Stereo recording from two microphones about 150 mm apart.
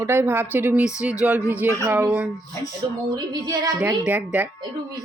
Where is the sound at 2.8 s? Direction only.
35° right (ahead or behind).